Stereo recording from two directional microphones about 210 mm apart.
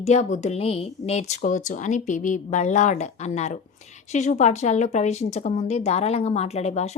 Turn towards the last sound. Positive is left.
turn(degrees=30)  # may be behind; listen again after turning